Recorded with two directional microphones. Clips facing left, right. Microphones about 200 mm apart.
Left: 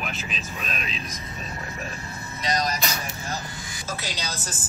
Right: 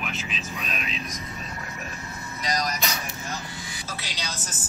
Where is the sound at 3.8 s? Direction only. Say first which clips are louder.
Left 5 dB; 45° left (ahead or behind).